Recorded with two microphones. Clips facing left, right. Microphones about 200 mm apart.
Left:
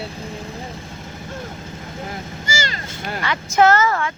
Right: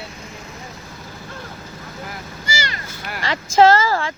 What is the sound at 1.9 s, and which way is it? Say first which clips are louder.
Vehicle: left 4 dB; 25° left (ahead or behind).